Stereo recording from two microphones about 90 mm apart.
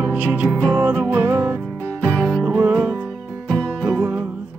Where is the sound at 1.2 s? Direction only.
35° right (ahead or behind).